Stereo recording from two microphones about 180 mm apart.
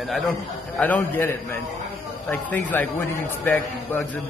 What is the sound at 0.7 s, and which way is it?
A man's voice, 10° left (ahead or behind).